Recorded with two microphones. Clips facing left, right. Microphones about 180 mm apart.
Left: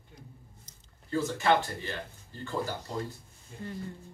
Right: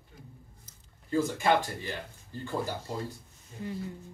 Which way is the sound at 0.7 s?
10° right (ahead or behind).